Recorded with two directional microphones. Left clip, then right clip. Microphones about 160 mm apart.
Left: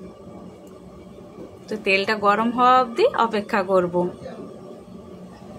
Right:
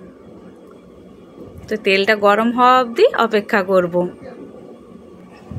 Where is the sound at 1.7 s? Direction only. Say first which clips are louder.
Right 6 dB; 30° right (ahead or behind).